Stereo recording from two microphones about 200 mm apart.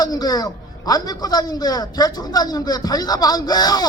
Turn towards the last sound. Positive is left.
turn(degrees=20)  # may be behind; listen again after turning